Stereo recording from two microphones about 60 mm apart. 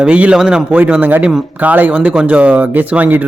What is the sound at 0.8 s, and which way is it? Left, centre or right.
Speech, right.